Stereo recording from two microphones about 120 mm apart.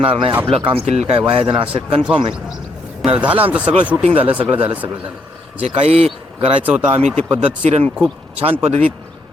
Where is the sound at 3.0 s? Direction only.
10° right (ahead or behind).